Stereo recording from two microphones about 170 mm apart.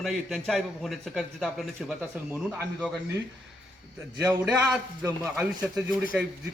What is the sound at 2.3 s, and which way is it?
Speech, 10° right (ahead or behind).